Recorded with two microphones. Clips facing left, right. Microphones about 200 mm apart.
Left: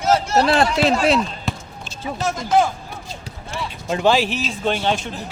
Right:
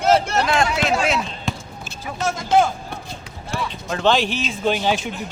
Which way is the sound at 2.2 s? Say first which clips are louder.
Right 1 dB; centre (ahead or behind).